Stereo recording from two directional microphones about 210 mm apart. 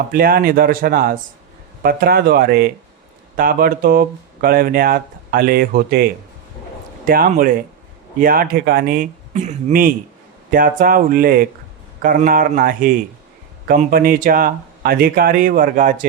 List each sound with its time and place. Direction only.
0.1 s speech: 45° right (ahead or behind)
7.1 s speech: 45° right (ahead or behind)